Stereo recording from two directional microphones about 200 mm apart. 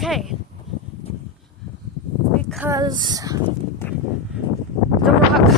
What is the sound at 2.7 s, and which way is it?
Speech, 20° right (ahead or behind).